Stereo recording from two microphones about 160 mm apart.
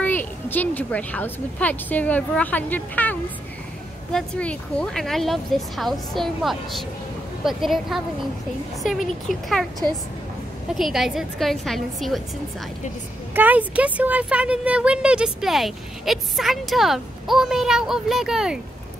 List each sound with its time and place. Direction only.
0.0 s a woman's voice: 10° left (ahead or behind)
9.3 s speech: centre (ahead or behind)
10.7 s speech: centre (ahead or behind)
13.3 s speech: 10° right (ahead or behind)